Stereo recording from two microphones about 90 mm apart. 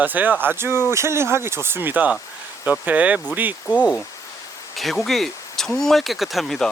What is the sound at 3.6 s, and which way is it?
Speech, 15° left (ahead or behind).